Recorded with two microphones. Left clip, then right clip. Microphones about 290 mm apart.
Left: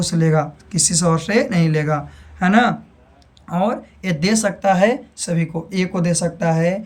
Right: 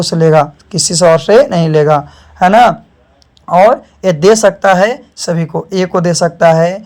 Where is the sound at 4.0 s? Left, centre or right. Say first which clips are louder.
Right 13 dB; centre.